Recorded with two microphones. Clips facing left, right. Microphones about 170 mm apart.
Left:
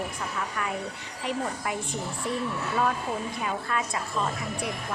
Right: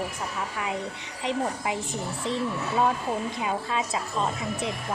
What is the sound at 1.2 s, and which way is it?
Speech, 20° right (ahead or behind).